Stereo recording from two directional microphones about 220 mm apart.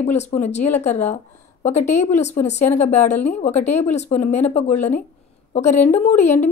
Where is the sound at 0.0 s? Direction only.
30° left (ahead or behind).